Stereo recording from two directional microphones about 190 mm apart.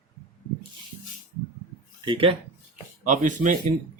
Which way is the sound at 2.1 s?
30° right (ahead or behind).